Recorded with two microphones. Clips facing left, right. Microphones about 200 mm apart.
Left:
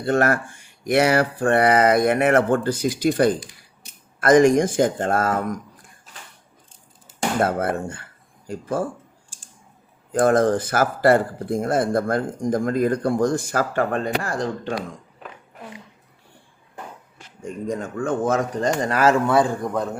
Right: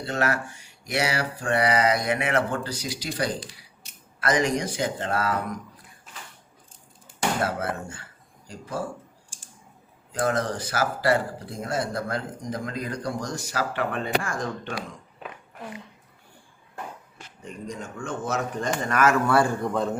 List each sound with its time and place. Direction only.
0.0 s speech: 50° left (ahead or behind)
7.4 s speech: 55° left (ahead or behind)
10.1 s speech: 50° left (ahead or behind)
17.4 s speech: 55° left (ahead or behind)
18.5 s speech: 35° left (ahead or behind)
19.3 s a man's voice: 20° left (ahead or behind)
19.6 s a man's voice: centre (ahead or behind)